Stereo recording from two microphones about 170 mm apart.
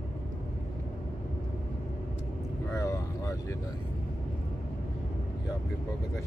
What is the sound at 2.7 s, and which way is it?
Vehicle, 20° left (ahead or behind).